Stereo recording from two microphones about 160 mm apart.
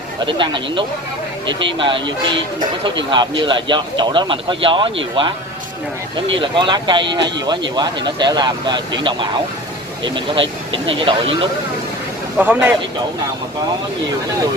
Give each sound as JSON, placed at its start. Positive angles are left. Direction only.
{"t": 0.2, "sound": "speech", "side_deg": -30}
{"t": 12.4, "sound": "speech", "side_deg": -10}